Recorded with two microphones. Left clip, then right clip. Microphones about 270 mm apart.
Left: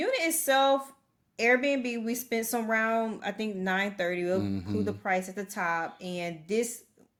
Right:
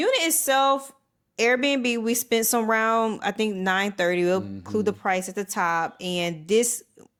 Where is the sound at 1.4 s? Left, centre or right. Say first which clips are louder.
Right 4 dB; right.